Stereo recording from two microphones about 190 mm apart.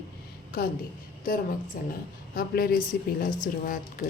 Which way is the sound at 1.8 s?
50° left (ahead or behind).